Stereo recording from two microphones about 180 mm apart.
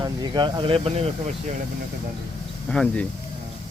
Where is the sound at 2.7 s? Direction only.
5° left (ahead or behind).